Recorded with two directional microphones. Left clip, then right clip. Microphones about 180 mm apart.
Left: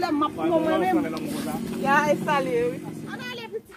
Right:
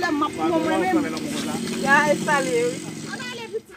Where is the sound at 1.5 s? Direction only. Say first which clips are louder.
Right 3 dB; 10° left (ahead or behind).